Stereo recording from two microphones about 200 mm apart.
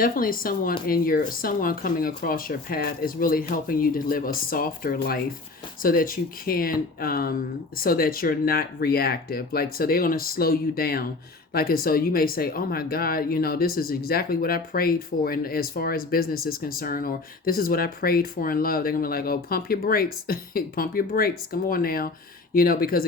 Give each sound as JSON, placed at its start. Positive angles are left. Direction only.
{"t": 0.0, "sound": "speech", "side_deg": 45}